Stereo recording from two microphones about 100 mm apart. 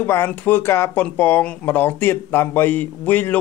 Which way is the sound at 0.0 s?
20° left (ahead or behind).